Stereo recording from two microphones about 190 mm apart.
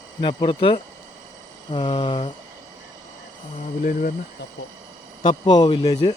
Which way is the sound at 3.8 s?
45° left (ahead or behind).